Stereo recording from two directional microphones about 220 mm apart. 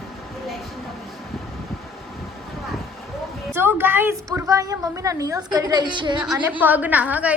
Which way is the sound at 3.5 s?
10° right (ahead or behind).